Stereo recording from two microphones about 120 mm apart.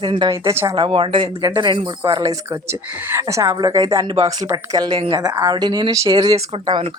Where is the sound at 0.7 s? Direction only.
45° right (ahead or behind).